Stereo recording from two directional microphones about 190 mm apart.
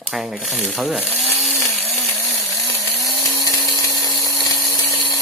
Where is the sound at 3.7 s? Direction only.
15° left (ahead or behind).